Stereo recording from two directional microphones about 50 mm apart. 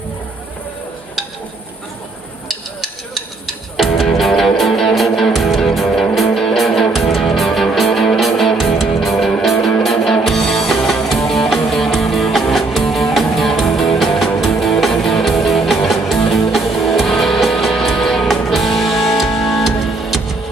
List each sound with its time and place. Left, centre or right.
3.4 s music: centre